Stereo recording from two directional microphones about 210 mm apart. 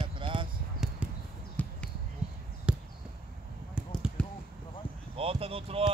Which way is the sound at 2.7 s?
5° right (ahead or behind).